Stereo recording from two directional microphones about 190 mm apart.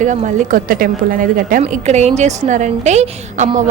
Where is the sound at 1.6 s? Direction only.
35° right (ahead or behind).